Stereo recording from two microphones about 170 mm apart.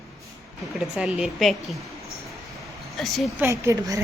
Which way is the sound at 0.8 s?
5° right (ahead or behind).